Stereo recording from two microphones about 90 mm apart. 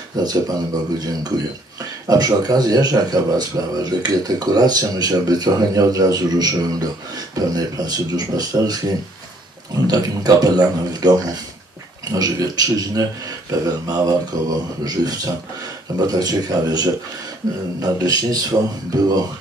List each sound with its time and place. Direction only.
0.1 s speech: 50° right (ahead or behind)
1.8 s speech: 45° right (ahead or behind)